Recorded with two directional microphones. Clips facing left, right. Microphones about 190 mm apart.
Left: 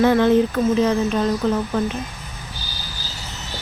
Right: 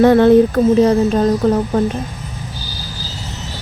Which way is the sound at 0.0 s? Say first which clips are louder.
Right 6 dB; 50° right (ahead or behind).